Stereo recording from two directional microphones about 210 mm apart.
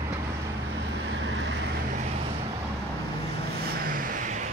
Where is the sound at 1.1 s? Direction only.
60° right (ahead or behind).